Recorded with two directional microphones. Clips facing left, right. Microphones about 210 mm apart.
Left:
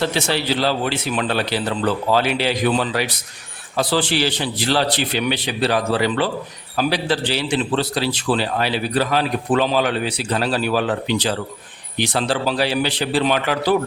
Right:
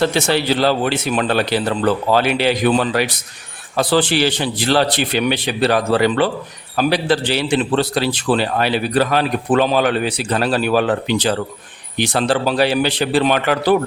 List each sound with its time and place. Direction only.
0.0 s a man's voice: 50° right (ahead or behind)